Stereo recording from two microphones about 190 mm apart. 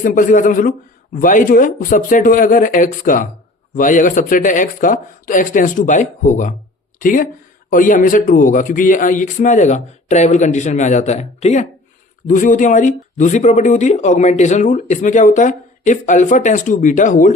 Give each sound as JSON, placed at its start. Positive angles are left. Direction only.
{"t": 0.0, "sound": "speech", "side_deg": 45}